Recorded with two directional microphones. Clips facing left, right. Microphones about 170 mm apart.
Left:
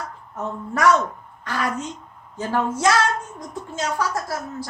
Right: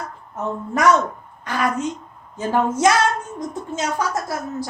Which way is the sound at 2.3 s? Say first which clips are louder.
Right 3 dB; 20° right (ahead or behind).